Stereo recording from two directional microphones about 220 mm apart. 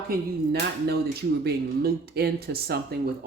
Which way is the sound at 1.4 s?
45° right (ahead or behind).